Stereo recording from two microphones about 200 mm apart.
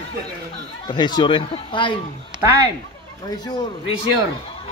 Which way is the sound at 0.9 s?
20° left (ahead or behind).